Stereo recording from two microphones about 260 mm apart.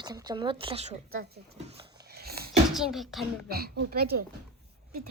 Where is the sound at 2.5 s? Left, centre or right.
Centre.